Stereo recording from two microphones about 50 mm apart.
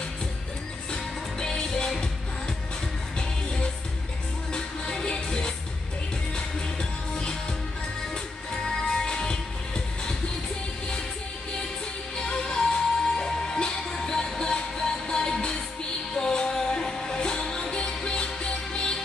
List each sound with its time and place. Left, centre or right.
0.9 s music: centre
4.5 s music: centre
8.9 s music: centre
12.2 s music: centre